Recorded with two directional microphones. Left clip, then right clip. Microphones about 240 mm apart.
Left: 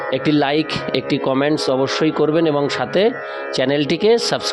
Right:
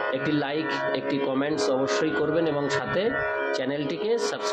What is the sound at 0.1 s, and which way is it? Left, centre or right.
Speech, left.